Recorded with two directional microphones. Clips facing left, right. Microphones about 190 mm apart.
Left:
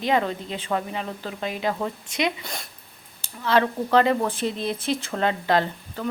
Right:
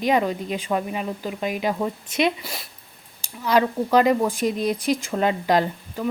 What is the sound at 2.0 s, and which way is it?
Speech, 20° left (ahead or behind).